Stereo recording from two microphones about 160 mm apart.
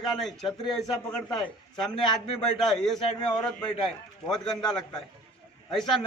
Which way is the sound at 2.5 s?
Centre (ahead or behind).